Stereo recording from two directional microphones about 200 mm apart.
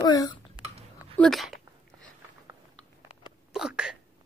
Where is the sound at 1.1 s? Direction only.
Centre (ahead or behind).